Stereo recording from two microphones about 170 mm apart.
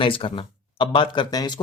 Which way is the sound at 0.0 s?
30° left (ahead or behind).